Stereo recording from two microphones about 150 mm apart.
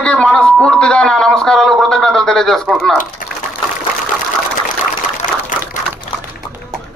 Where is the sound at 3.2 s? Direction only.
65° left (ahead or behind).